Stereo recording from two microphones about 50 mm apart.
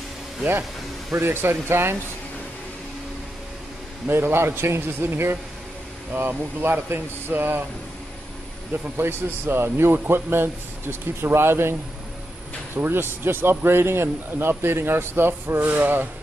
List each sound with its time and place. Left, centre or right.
1.1 s a man's voice: right
4.1 s a man's voice: right
8.9 s a man's voice: right
12.7 s a man's voice: right
15.6 s speech: right